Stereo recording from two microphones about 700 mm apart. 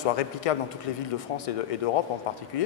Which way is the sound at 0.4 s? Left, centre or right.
Left.